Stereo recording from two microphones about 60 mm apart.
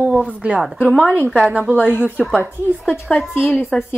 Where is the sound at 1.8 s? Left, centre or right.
Centre.